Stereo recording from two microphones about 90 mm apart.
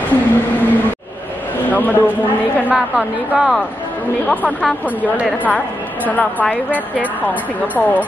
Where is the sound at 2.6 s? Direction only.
15° right (ahead or behind).